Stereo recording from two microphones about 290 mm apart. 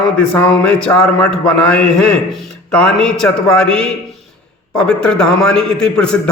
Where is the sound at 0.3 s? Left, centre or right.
Centre.